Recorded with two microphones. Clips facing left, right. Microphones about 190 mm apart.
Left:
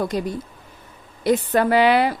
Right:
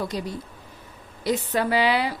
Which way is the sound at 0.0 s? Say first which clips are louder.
Left 5 dB; 50° left (ahead or behind).